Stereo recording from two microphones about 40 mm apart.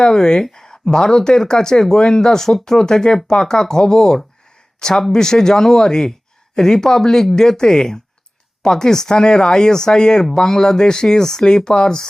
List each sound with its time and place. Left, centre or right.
0.0 s speech: centre